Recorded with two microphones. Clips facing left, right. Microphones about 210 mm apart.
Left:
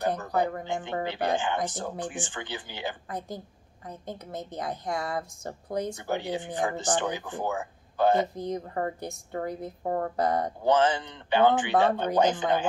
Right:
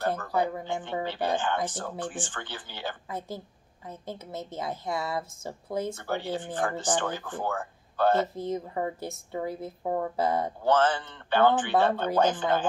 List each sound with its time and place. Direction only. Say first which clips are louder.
0.0 s speech: left 1 dB; 15° left (ahead or behind)
3.1 s a woman's voice: even; 5° right (ahead or behind)
5.9 s speech: left 1 dB; 15° left (ahead or behind)
8.4 s a woman's voice: even; 5° right (ahead or behind)
10.6 s speech: left 1 dB; 15° left (ahead or behind)